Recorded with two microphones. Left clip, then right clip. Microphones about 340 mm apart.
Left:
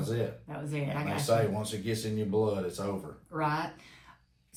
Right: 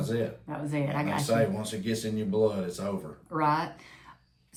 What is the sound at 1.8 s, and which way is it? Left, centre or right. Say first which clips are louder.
Speech: right 2 dB; centre.